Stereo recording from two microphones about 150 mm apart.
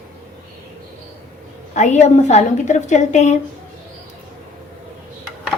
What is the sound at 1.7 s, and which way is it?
A woman's voice, 50° left (ahead or behind).